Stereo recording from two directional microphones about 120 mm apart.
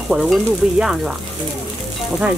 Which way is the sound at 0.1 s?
5° right (ahead or behind).